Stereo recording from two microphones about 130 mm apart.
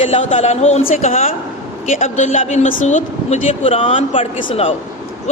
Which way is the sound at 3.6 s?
50° left (ahead or behind).